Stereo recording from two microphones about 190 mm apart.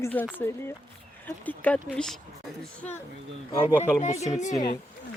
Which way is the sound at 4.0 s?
35° left (ahead or behind).